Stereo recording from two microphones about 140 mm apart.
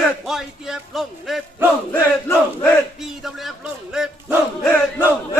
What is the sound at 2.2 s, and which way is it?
Battle cry, 15° left (ahead or behind).